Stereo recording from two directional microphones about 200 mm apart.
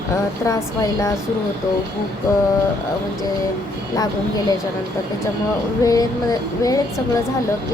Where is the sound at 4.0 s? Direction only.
20° left (ahead or behind).